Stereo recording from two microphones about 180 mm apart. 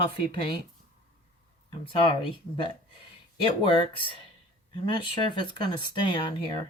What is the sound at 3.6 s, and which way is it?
Speech, 30° left (ahead or behind).